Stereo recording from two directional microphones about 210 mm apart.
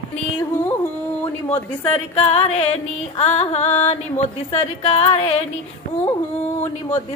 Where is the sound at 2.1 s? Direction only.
30° left (ahead or behind).